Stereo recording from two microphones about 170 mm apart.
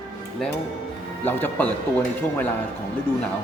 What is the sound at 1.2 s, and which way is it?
Speech, 10° left (ahead or behind).